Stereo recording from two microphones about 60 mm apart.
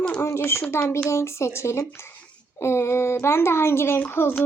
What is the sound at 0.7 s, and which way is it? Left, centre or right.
Speech, left.